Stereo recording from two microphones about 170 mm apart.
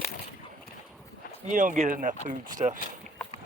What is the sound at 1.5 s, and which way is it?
Speech, 50° right (ahead or behind).